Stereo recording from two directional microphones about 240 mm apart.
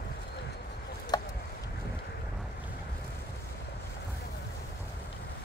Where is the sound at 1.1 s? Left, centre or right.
Centre.